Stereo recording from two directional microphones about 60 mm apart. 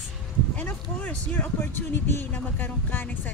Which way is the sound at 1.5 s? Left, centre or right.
Left.